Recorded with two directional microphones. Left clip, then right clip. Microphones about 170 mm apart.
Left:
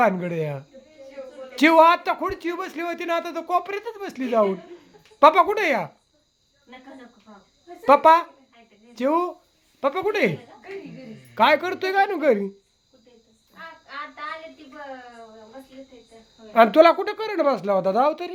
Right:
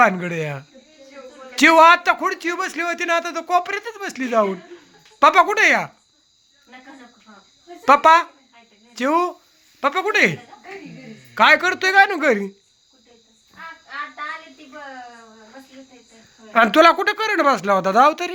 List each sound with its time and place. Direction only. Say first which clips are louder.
0.0 s a man's voice: right 4 dB; 5° left (ahead or behind)
7.9 s speech: right 2 dB; 5° left (ahead or behind)
11.3 s speech: right 5 dB; 10° left (ahead or behind)
16.5 s a man's voice: right 1 dB; centre (ahead or behind)